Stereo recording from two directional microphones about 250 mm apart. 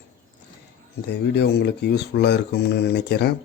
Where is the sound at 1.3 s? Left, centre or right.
Left.